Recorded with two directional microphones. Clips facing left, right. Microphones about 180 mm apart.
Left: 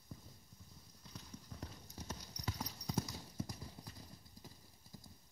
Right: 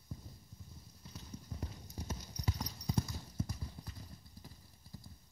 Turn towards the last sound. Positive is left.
turn(degrees=15)  # may be behind; listen again after turning